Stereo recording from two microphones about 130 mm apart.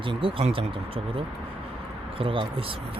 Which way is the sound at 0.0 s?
40° right (ahead or behind).